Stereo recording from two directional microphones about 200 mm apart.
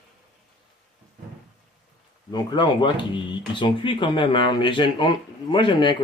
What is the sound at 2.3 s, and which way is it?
Speech, 20° left (ahead or behind).